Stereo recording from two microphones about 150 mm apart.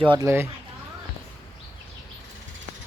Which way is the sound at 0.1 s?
20° right (ahead or behind).